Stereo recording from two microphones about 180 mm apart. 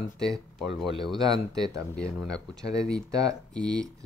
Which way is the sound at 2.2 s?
5° left (ahead or behind).